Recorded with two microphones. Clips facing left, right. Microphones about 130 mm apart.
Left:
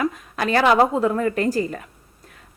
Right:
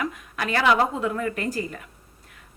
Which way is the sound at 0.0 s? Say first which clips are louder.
Left 6 dB; 35° left (ahead or behind).